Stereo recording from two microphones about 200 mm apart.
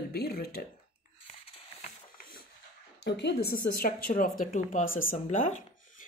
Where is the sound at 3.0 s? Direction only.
55° left (ahead or behind).